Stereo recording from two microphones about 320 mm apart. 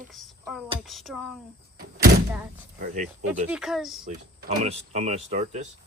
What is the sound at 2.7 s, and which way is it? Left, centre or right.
Speech, right.